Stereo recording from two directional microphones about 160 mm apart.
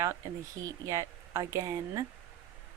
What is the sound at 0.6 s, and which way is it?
Speech, 20° right (ahead or behind).